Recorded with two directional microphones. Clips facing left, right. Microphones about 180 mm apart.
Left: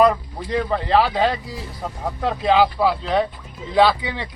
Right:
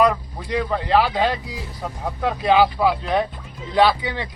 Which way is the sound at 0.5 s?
5° right (ahead or behind).